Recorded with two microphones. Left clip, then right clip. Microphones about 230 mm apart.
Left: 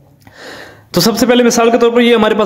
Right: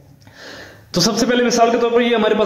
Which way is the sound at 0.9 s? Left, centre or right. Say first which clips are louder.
Left 6 dB; left.